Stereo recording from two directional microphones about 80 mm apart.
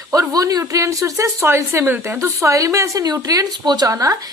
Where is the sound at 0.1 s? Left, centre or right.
Right.